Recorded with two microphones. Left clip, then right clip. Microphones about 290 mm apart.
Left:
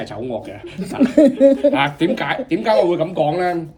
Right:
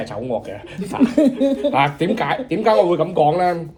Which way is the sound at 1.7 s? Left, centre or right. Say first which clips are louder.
Even; centre.